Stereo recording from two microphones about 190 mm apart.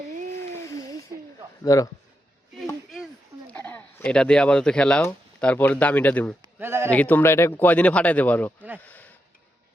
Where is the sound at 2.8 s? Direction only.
Centre (ahead or behind).